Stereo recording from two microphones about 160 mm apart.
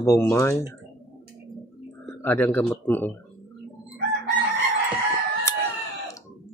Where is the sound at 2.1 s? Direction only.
10° left (ahead or behind).